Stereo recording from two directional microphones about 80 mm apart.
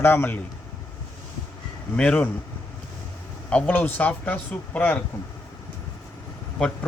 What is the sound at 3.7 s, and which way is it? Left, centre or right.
Speech, left.